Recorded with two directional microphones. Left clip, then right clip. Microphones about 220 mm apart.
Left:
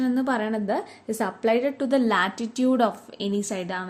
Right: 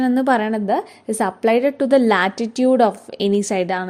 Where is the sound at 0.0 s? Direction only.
35° right (ahead or behind).